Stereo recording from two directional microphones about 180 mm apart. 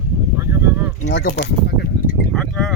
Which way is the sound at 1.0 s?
70° left (ahead or behind).